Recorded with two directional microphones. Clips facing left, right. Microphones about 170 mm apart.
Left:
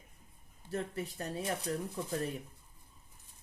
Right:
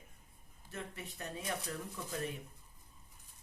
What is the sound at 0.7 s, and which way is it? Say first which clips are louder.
Speech: left 8 dB; 35° left (ahead or behind).